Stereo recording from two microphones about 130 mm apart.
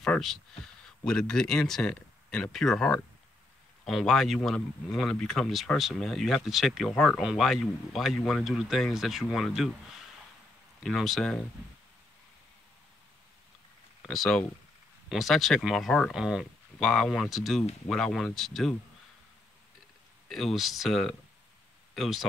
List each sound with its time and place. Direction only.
0.0 s speech: 5° left (ahead or behind)
14.0 s speech: 5° left (ahead or behind)
20.2 s speech: centre (ahead or behind)